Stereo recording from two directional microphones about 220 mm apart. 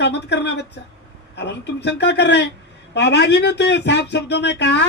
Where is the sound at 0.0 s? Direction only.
50° left (ahead or behind).